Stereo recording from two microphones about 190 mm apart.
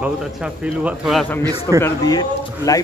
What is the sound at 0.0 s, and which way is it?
A man's voice, 5° right (ahead or behind).